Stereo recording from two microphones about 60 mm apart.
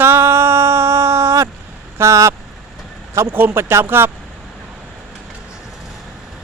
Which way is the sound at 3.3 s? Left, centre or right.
Right.